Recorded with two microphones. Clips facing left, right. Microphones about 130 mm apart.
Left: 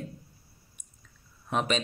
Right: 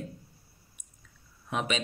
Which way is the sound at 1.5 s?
5° right (ahead or behind).